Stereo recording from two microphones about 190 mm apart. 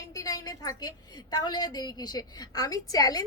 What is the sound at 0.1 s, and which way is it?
A woman's voice, 15° left (ahead or behind).